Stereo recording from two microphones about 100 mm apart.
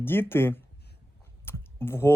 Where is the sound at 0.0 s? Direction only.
20° left (ahead or behind).